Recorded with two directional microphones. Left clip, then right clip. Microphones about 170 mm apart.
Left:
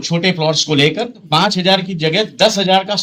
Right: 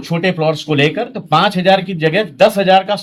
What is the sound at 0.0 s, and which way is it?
Speech, 40° right (ahead or behind).